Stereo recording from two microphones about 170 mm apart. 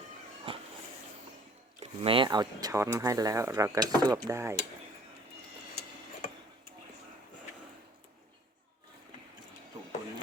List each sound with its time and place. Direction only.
0.5 s cat: 30° right (ahead or behind)
1.8 s speech: 35° right (ahead or behind); by 4.5 s 15° right (ahead or behind)